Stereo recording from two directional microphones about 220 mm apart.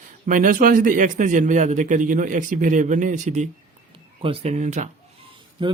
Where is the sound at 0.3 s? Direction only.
35° right (ahead or behind).